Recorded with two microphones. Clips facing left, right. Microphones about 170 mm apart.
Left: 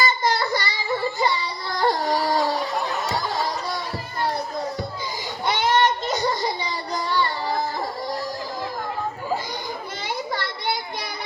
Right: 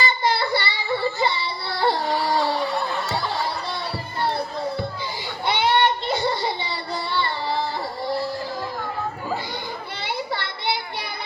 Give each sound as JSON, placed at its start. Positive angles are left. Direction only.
{"t": 0.0, "sound": "child singing", "side_deg": 40}
{"t": 1.2, "sound": "baby cry", "side_deg": 40}
{"t": 3.1, "sound": "music", "side_deg": 40}
{"t": 5.5, "sound": "child singing", "side_deg": 40}
{"t": 10.3, "sound": "a sound", "side_deg": 40}